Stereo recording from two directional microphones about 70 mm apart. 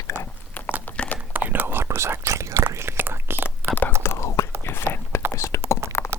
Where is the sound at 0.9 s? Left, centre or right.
Left.